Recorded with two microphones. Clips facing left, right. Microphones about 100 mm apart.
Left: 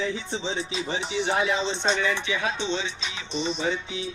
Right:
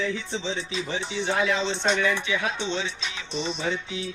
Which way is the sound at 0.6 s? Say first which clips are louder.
Left 1 dB; 20° left (ahead or behind).